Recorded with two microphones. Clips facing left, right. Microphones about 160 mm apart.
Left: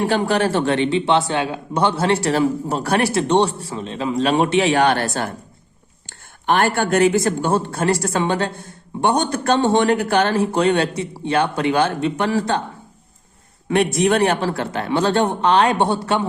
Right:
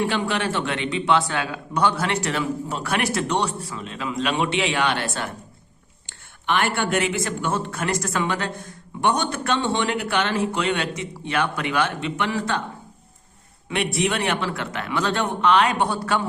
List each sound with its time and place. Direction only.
0.0 s speech: 40° left (ahead or behind)
13.7 s speech: 40° left (ahead or behind); by 16.2 s 25° left (ahead or behind)